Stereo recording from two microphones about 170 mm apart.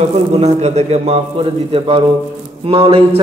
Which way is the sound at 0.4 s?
40° right (ahead or behind).